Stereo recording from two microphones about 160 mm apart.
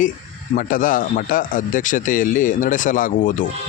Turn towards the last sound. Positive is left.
turn(degrees=55)  # may be behind; listen again after turning